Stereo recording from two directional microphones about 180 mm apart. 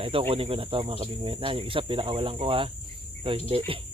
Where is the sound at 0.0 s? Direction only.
30° right (ahead or behind).